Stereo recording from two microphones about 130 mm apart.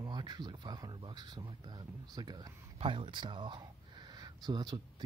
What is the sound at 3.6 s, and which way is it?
Gasp, 30° right (ahead or behind).